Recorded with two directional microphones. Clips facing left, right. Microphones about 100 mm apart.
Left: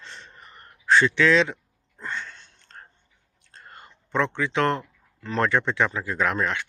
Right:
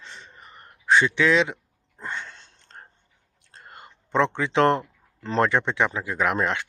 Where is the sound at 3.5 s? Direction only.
20° right (ahead or behind).